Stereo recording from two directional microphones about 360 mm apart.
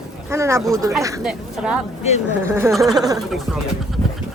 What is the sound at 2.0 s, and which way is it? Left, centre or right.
Speech, centre.